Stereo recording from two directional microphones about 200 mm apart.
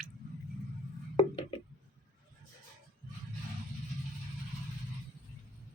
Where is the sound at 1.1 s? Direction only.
25° left (ahead or behind).